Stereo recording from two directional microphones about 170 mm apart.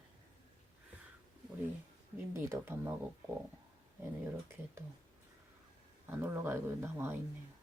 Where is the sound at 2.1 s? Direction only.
15° right (ahead or behind).